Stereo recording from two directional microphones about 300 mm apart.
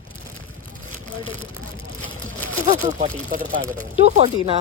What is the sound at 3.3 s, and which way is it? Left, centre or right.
Speech, right.